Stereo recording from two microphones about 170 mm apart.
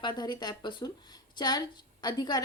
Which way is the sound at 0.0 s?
25° left (ahead or behind).